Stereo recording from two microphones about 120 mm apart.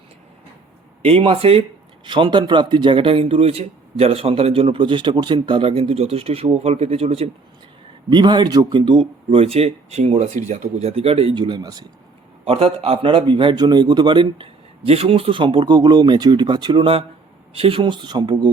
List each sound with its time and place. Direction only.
1.0 s a man's voice: 50° right (ahead or behind)
2.0 s a man's voice: 40° right (ahead or behind)
8.1 s a man's voice: 40° right (ahead or behind)
12.5 s a man's voice: 55° right (ahead or behind); by 18.5 s 35° right (ahead or behind)